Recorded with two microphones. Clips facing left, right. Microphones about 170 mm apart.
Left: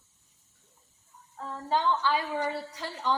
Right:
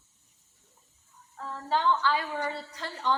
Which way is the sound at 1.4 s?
15° left (ahead or behind).